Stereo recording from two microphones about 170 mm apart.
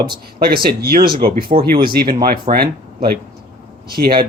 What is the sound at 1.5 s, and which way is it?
Speech, 40° right (ahead or behind).